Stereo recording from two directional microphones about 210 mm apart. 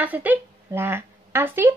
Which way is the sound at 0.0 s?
10° right (ahead or behind).